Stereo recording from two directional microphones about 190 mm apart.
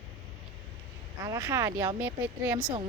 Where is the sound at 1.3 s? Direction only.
15° right (ahead or behind).